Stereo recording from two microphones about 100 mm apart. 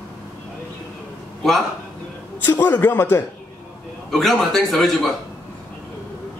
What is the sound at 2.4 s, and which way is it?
Speech, 20° left (ahead or behind).